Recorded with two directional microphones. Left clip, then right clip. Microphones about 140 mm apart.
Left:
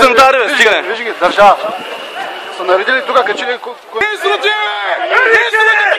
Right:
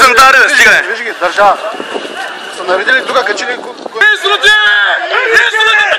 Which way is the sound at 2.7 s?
45° right (ahead or behind).